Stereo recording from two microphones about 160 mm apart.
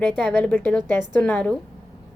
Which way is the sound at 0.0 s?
5° left (ahead or behind).